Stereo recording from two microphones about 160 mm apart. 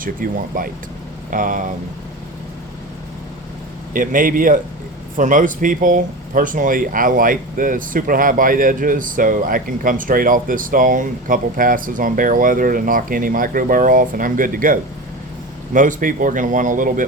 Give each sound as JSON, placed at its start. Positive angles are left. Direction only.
{"t": 0.0, "sound": "speech", "side_deg": -60}
{"t": 3.9, "sound": "speech", "side_deg": -55}